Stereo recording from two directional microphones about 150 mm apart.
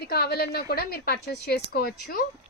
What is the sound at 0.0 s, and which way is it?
A woman's voice, 90° left.